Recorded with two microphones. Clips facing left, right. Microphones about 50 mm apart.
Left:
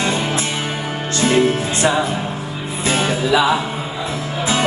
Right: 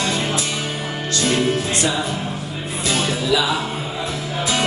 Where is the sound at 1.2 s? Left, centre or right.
Left.